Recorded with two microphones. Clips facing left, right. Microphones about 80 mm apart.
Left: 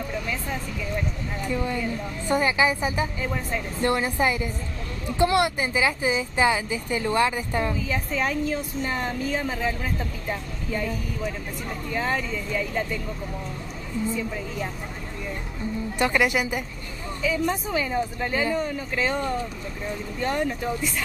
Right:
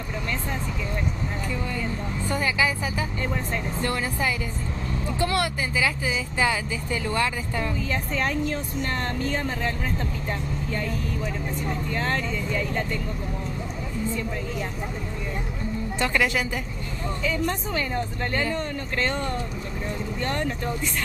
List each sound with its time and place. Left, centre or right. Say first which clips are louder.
1.5 s speech: left 7 dB; left
7.7 s speech: even; centre
16.0 s speech: left 2 dB; centre
17.2 s speech: left 3 dB; centre